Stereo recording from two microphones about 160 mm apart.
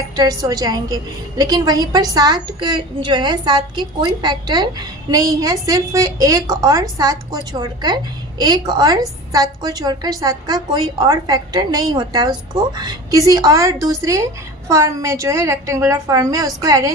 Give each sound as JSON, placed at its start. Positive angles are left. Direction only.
{"t": 0.2, "sound": "a woman's voice", "side_deg": -25}